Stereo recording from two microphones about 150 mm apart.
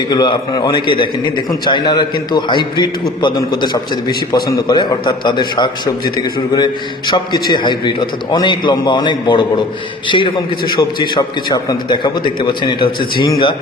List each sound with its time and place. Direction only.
0.1 s a man's voice: 25° left (ahead or behind)